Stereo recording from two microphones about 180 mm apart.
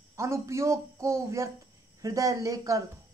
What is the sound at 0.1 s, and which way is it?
A man's voice, 15° right (ahead or behind).